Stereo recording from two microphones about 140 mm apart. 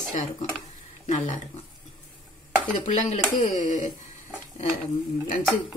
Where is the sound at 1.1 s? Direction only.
60° left (ahead or behind).